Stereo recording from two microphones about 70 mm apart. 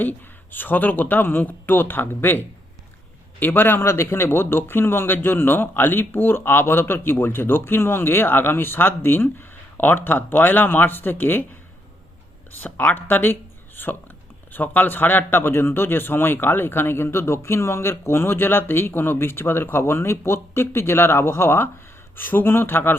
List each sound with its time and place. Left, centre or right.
0.0 s speech: left
3.4 s a man's voice: left
12.5 s a man's voice: left